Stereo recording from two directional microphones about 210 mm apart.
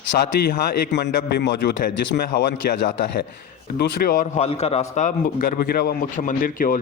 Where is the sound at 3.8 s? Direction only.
45° left (ahead or behind).